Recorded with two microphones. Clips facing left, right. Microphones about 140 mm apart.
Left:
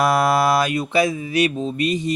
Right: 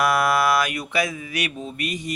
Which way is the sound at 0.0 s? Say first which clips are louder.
Left 3 dB; 25° left (ahead or behind).